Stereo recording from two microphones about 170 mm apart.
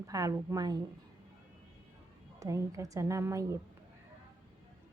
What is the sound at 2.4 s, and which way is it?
A woman's voice, 20° right (ahead or behind).